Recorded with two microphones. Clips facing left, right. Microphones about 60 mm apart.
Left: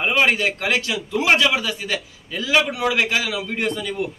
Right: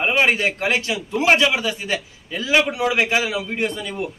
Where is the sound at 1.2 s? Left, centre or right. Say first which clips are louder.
Right 1 dB; centre.